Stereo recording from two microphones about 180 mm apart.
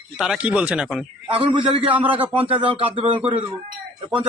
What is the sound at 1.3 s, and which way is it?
Speech, 30° right (ahead or behind).